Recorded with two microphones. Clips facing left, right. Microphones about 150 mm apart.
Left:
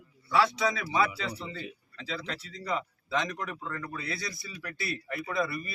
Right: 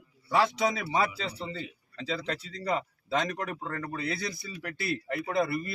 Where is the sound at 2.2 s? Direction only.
50° right (ahead or behind).